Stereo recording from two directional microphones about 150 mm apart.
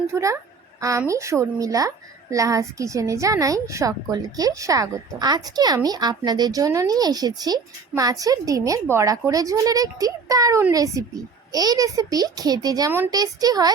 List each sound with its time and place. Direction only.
0.1 s a woman's voice: 20° right (ahead or behind)